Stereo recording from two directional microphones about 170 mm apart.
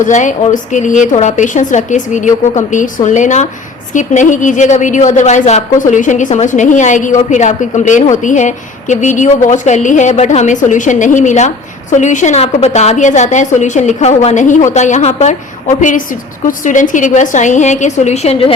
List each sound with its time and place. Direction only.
0.0 s a woman's voice: 45° left (ahead or behind)
16.5 s a woman's voice: 50° left (ahead or behind)